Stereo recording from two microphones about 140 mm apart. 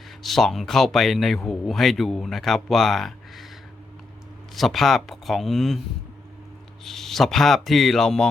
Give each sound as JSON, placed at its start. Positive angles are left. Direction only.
{"t": 0.2, "sound": "speech", "side_deg": 0}
{"t": 4.5, "sound": "speech", "side_deg": 0}
{"t": 6.8, "sound": "speech", "side_deg": 0}